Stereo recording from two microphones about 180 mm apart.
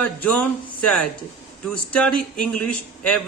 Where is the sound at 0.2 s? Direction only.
5° left (ahead or behind).